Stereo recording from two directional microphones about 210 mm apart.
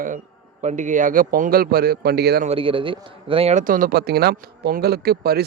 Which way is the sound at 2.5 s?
25° right (ahead or behind).